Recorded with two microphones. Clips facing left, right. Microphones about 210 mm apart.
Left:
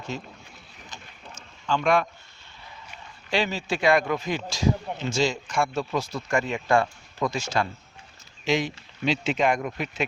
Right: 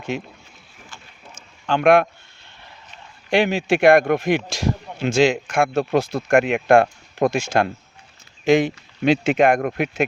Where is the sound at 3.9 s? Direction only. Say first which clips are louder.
Right 7 dB; 50° right (ahead or behind).